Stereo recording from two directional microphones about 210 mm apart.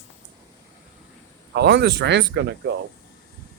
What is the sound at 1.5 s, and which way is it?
Speech, 55° right (ahead or behind).